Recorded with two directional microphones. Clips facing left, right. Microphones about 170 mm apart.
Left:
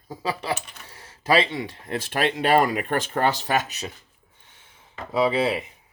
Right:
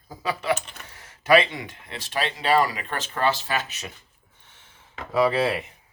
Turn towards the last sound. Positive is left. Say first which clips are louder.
# even
turn(degrees=15)  # may be behind; listen again after turning